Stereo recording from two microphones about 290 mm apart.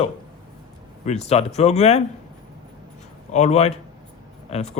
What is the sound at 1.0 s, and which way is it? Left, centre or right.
Speech, left.